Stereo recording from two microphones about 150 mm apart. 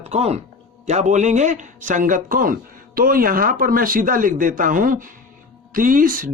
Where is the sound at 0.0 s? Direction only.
45° right (ahead or behind).